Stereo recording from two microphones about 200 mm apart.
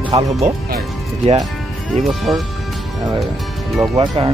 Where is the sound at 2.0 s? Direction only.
Centre (ahead or behind).